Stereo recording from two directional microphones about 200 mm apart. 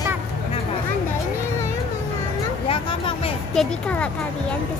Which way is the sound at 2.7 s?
25° left (ahead or behind).